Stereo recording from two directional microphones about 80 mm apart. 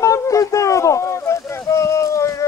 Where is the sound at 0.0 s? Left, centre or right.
Left.